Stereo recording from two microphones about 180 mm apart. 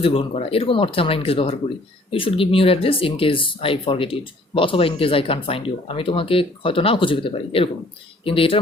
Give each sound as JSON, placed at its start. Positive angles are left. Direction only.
{"t": 0.0, "sound": "speech", "side_deg": 30}